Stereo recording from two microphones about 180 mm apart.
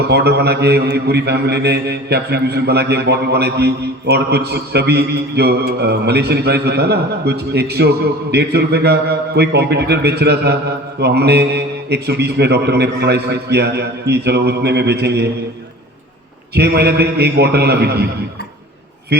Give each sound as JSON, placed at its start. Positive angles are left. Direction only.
{"t": 0.1, "sound": "mantra", "side_deg": -65}
{"t": 16.6, "sound": "mantra", "side_deg": -60}